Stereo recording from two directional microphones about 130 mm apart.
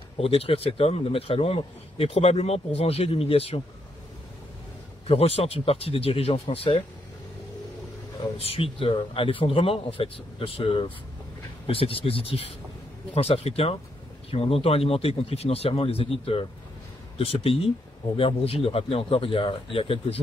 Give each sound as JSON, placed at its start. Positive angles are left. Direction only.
{"t": 0.2, "sound": "a man's voice", "side_deg": 50}
{"t": 5.0, "sound": "a man's voice", "side_deg": 50}
{"t": 8.4, "sound": "a man's voice", "side_deg": 50}